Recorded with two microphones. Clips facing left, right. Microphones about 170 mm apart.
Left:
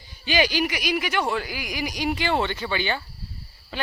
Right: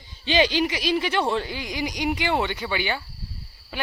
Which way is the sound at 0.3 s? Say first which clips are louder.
Right 2 dB; 25° right (ahead or behind).